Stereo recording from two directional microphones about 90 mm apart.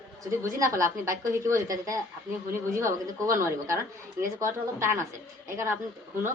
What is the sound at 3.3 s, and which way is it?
A woman's voice, 35° right (ahead or behind).